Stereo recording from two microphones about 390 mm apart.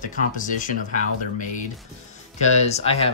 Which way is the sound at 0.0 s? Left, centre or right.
Centre.